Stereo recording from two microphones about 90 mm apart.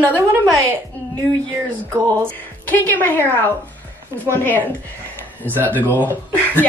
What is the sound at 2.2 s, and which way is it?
A woman's voice, 20° left (ahead or behind).